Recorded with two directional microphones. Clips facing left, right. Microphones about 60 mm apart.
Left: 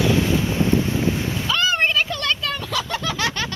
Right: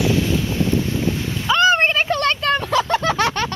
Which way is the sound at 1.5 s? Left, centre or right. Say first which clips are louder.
Right 6 dB; right.